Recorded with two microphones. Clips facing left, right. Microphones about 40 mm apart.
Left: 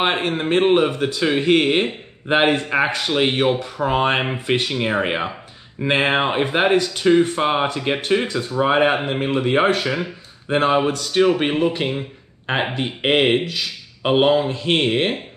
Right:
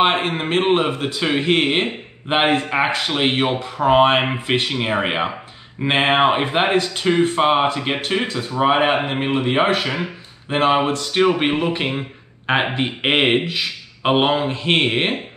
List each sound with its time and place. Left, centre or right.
0.0 s speech: centre